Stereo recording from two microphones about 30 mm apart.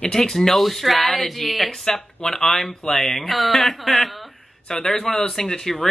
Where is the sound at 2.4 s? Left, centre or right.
Centre.